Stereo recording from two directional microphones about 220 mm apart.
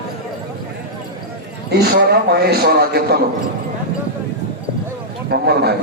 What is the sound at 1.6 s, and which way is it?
A man's voice, 45° right (ahead or behind).